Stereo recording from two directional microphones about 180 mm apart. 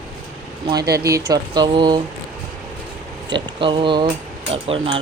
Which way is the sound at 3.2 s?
25° right (ahead or behind).